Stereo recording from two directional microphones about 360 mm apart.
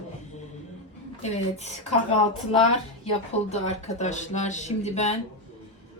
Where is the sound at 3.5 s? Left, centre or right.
Centre.